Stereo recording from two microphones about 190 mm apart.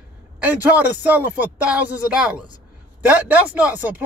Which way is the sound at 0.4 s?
10° right (ahead or behind).